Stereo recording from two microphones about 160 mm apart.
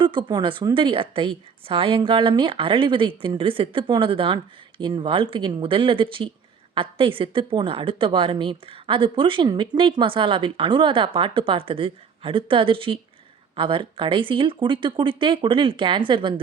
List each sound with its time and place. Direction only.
0.0 s speech: 30° right (ahead or behind)